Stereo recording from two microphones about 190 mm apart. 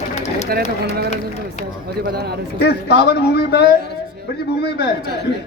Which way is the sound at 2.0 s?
55° right (ahead or behind).